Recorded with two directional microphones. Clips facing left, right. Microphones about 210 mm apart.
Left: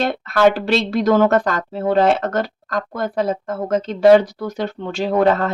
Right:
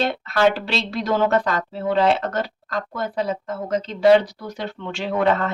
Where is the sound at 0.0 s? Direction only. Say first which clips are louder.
Left 3 dB; 45° left (ahead or behind).